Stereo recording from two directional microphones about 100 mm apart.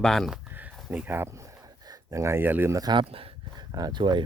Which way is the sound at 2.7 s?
40° right (ahead or behind).